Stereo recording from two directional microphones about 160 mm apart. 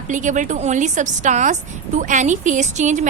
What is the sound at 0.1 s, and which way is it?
A woman's voice, 50° right (ahead or behind).